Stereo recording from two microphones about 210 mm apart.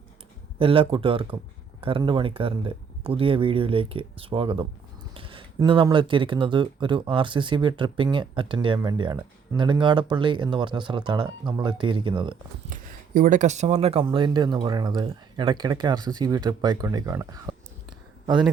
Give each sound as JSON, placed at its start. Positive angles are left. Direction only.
{"t": 0.6, "sound": "speech", "side_deg": -25}
{"t": 12.7, "sound": "speech", "side_deg": -40}